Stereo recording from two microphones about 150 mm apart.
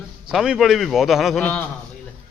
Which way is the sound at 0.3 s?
5° right (ahead or behind).